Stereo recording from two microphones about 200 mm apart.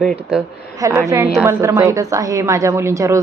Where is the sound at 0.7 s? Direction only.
15° right (ahead or behind).